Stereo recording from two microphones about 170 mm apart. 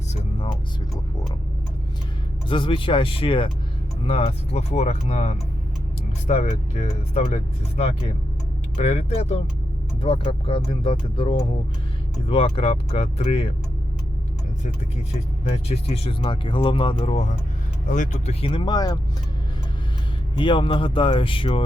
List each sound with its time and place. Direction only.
0.1 s a sound: 35° left (ahead or behind)
2.5 s speech: 30° left (ahead or behind)
15.5 s speech: 35° left (ahead or behind)
17.8 s speech: 45° left (ahead or behind)
18.4 s speech: 30° left (ahead or behind)
20.3 s speech: 30° left (ahead or behind)